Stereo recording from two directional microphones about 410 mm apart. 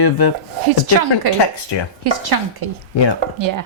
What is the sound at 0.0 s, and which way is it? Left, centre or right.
Speech, left.